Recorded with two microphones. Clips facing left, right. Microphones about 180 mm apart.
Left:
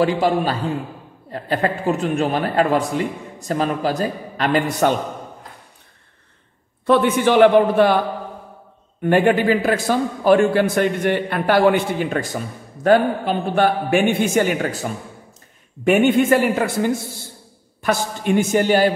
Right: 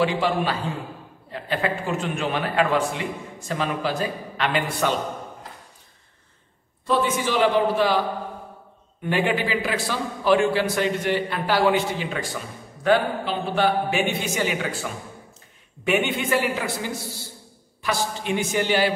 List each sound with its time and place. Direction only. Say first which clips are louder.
0.2 s a man's voice: left 5 dB; 40° left (ahead or behind)
6.9 s a man's voice: left 7 dB; 60° left (ahead or behind)
9.0 s a man's voice: left 8 dB; 50° left (ahead or behind)